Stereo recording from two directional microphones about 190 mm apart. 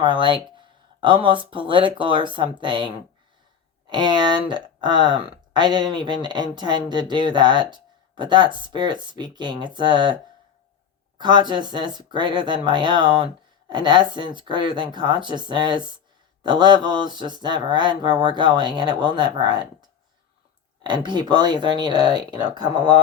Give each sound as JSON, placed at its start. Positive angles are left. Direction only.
{"t": 0.0, "sound": "speech", "side_deg": -25}
{"t": 11.2, "sound": "speech", "side_deg": -25}